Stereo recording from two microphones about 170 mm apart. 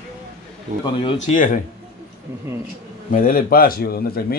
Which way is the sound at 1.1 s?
50° left (ahead or behind).